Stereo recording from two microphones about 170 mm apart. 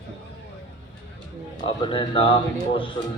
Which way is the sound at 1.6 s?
30° left (ahead or behind).